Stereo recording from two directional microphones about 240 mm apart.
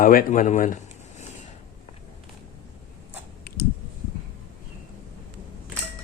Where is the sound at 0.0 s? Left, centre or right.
Left.